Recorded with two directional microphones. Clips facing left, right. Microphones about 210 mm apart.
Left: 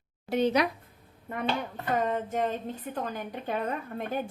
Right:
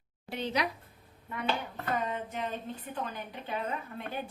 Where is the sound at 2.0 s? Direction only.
45° left (ahead or behind).